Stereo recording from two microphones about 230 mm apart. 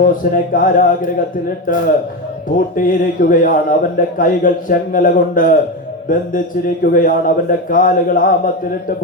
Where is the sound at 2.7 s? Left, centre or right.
Left.